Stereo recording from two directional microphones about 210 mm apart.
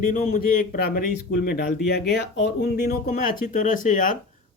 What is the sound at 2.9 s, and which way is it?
Speech, 40° left (ahead or behind).